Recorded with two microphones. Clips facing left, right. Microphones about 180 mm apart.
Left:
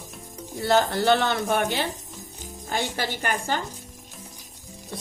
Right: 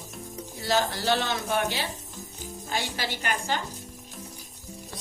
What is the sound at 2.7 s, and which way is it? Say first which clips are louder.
Speech: left 4 dB; 50° left (ahead or behind).